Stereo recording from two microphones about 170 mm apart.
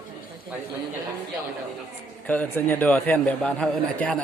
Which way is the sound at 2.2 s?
10° left (ahead or behind).